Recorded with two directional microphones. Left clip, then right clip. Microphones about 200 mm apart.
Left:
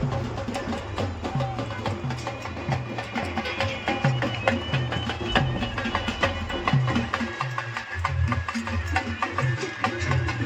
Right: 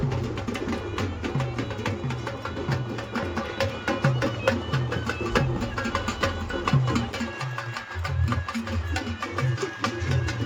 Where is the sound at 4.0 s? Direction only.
20° left (ahead or behind).